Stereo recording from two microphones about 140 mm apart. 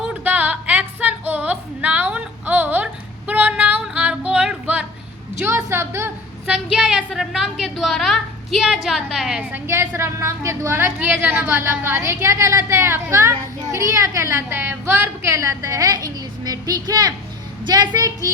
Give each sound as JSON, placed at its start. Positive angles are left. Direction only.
{"t": 0.1, "sound": "female singing", "side_deg": -10}
{"t": 5.4, "sound": "a sound", "side_deg": -20}
{"t": 7.6, "sound": "a woman's voice", "side_deg": 0}
{"t": 9.5, "sound": "a woman's voice", "side_deg": -15}